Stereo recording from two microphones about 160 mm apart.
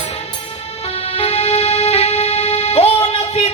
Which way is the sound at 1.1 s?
35° left (ahead or behind).